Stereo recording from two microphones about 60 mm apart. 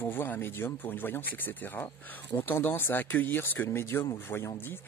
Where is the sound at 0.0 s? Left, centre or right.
Left.